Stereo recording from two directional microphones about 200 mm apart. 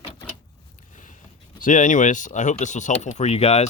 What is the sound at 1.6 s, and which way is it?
Speech, 40° left (ahead or behind).